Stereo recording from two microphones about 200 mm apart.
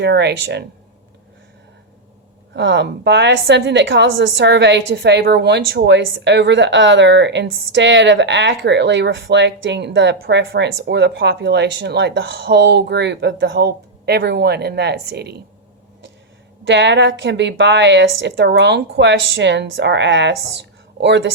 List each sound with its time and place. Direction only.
0.0 s a woman's voice: 55° right (ahead or behind)
2.5 s a woman's voice: 60° right (ahead or behind)
16.6 s a woman's voice: 60° right (ahead or behind)